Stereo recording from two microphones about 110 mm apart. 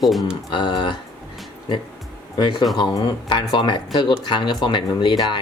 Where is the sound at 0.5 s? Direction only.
45° left (ahead or behind).